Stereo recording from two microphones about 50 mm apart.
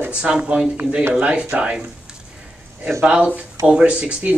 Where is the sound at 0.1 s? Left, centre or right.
Right.